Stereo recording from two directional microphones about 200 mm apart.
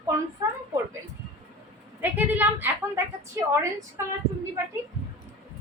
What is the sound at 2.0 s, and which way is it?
A woman's voice, 10° right (ahead or behind).